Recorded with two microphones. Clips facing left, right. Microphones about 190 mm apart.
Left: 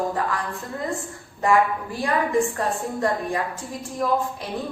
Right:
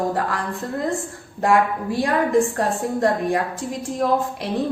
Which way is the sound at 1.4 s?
85° right.